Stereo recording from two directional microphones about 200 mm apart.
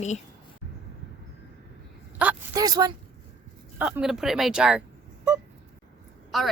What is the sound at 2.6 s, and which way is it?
Speech, 20° right (ahead or behind).